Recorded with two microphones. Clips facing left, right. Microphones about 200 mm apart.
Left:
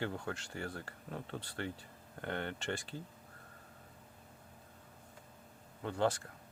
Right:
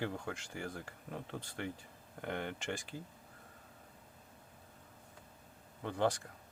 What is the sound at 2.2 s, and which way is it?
Speech, 10° right (ahead or behind).